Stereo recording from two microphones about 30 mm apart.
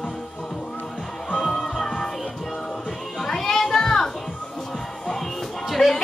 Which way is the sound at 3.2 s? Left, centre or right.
Centre.